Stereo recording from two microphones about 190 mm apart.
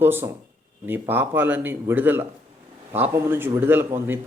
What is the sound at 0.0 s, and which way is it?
A man's voice, 10° right (ahead or behind).